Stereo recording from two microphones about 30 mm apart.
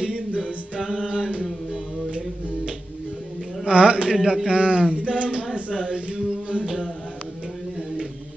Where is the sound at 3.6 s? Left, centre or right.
Right.